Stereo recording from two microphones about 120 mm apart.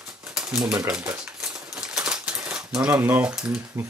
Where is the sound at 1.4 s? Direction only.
5° right (ahead or behind).